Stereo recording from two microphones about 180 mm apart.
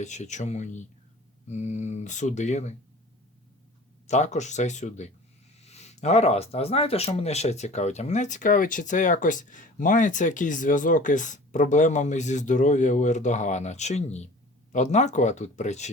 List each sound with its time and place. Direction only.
0.0 s speech: 40° left (ahead or behind)
4.0 s speech: 40° left (ahead or behind)